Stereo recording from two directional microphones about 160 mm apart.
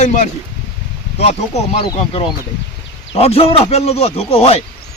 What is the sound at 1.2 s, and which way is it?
Speech, 40° left (ahead or behind).